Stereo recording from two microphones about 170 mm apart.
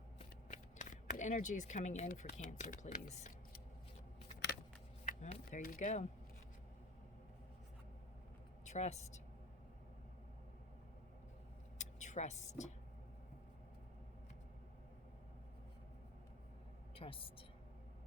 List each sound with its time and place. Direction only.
0.2 s speech: 45° left (ahead or behind)
5.0 s speech: 45° left (ahead or behind)
8.6 s a woman's voice: 40° left (ahead or behind)
11.8 s a sound: 45° left (ahead or behind)
16.9 s a woman's voice: 30° left (ahead or behind)